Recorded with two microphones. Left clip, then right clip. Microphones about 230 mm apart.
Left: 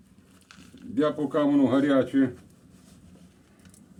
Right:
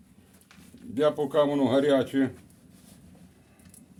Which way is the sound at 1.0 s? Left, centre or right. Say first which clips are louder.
Right 2 dB; right.